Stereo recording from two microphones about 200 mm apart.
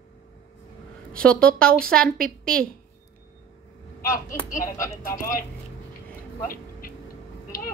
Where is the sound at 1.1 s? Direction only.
5° left (ahead or behind).